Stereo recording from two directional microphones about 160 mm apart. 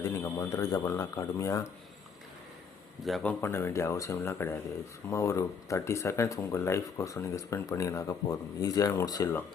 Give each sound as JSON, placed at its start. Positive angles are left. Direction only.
{"t": 0.0, "sound": "speech", "side_deg": 20}
{"t": 3.0, "sound": "a man's voice", "side_deg": 0}
{"t": 3.4, "sound": "speech", "side_deg": 15}